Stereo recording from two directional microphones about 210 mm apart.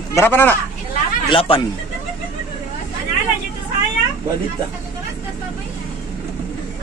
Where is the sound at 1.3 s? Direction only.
25° left (ahead or behind).